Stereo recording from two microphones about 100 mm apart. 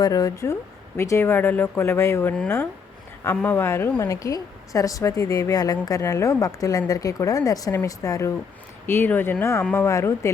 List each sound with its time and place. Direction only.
0.0 s speech: 40° left (ahead or behind)
8.9 s speech: 20° left (ahead or behind)